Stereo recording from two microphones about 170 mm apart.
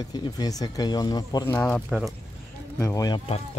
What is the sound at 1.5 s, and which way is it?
Speech, 10° left (ahead or behind).